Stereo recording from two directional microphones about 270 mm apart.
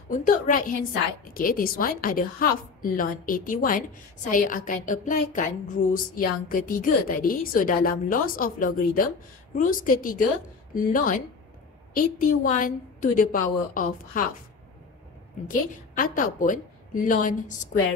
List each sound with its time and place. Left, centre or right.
0.1 s a woman's voice: left
15.4 s a woman's voice: left